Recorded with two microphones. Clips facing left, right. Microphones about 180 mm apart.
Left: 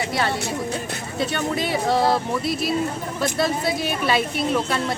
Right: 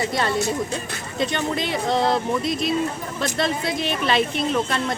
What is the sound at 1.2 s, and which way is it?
Speech, 5° left (ahead or behind).